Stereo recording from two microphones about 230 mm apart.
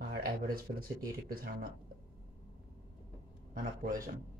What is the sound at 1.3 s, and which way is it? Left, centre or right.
Speech, right.